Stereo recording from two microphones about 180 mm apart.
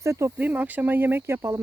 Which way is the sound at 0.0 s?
15° right (ahead or behind).